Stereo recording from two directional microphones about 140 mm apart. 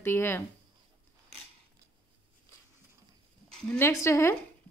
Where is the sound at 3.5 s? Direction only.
5° left (ahead or behind).